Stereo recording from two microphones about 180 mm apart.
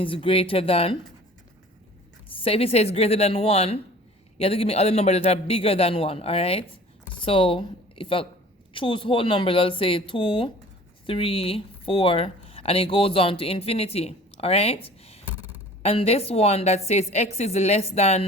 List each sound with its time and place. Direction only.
0.0 s a woman's voice: 30° left (ahead or behind)
2.4 s a woman's voice: 35° left (ahead or behind)
15.2 s a sound: 10° right (ahead or behind)
15.8 s a woman's voice: 35° left (ahead or behind)